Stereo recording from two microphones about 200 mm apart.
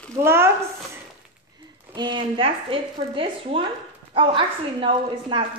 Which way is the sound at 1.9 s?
25° right (ahead or behind).